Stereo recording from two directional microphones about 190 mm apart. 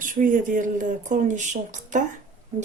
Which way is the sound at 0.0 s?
45° right (ahead or behind).